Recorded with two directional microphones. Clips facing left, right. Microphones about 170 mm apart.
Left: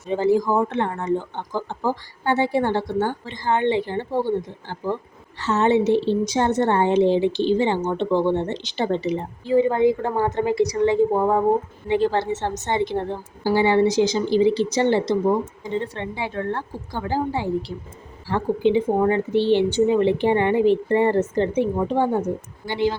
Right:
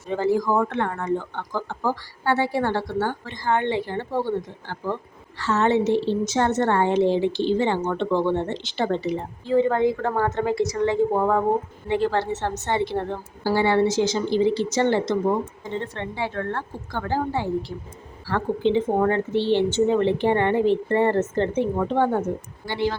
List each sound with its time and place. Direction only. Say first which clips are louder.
0.1 s speech: left 2 dB; 15° left (ahead or behind)